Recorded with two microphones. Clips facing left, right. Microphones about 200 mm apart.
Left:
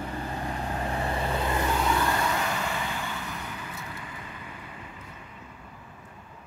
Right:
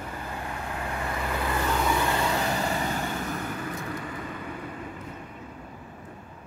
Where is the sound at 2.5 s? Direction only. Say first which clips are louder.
Right 4 dB; 40° right (ahead or behind).